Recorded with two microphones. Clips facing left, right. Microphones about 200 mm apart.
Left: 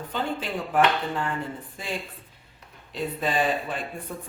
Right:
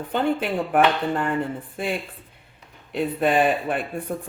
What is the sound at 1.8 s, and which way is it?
Speech, 60° right (ahead or behind).